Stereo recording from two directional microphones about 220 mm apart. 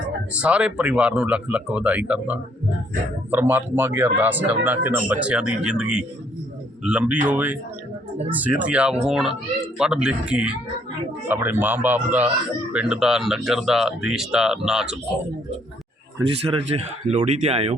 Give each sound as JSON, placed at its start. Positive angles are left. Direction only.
{"t": 0.3, "sound": "speech", "side_deg": -5}
{"t": 16.1, "sound": "speech", "side_deg": -25}